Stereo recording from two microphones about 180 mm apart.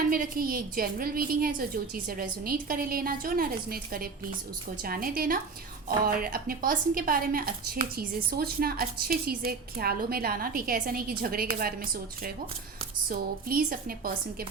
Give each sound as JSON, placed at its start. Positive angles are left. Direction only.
{"t": 0.1, "sound": "a woman's voice", "side_deg": -55}
{"t": 13.1, "sound": "a woman's voice", "side_deg": -55}